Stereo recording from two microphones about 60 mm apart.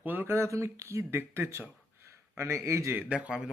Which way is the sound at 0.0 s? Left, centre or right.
Right.